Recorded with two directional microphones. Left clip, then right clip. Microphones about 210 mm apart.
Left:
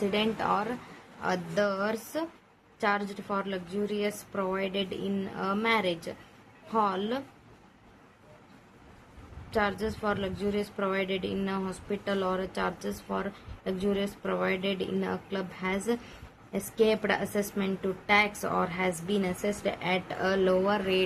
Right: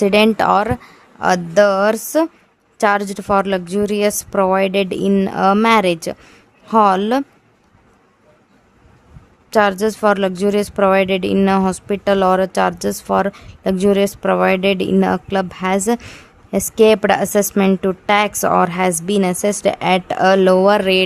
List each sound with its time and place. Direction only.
0.0 s a woman's voice: 55° right (ahead or behind)
9.5 s speech: 55° right (ahead or behind)